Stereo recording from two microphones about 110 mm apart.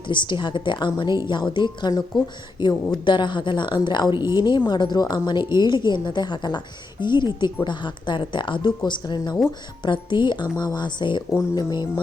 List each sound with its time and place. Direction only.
0.1 s a woman's voice: 45° left (ahead or behind)